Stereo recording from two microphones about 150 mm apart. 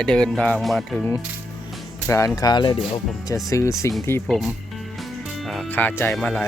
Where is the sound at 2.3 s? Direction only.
30° left (ahead or behind).